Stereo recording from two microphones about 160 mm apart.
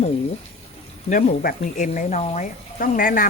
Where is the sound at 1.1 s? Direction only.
60° left (ahead or behind).